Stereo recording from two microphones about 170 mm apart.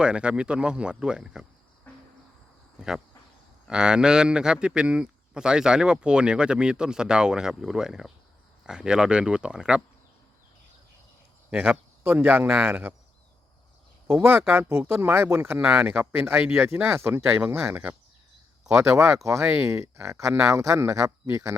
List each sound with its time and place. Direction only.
0.0 s speech: 5° right (ahead or behind)
2.7 s speech: 5° right (ahead or behind)
11.5 s speech: 10° right (ahead or behind)
14.1 s speech: 15° right (ahead or behind)